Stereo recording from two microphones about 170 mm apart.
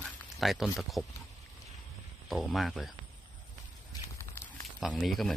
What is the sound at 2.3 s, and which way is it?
Speech, centre (ahead or behind).